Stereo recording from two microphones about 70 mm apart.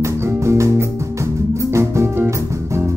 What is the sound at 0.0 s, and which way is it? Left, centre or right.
Music, right.